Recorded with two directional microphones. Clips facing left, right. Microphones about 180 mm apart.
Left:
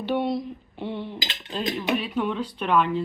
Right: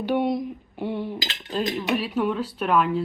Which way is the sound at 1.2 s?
20° left (ahead or behind).